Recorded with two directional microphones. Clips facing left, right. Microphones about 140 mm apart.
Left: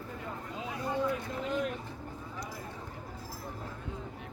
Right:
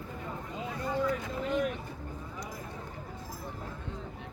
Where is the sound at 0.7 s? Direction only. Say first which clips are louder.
Right 1 dB; 5° left (ahead or behind).